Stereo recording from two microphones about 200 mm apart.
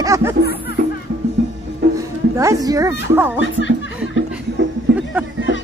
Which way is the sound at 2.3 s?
15° right (ahead or behind).